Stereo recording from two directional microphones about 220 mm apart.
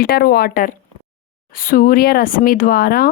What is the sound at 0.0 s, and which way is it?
Speech, 45° left (ahead or behind).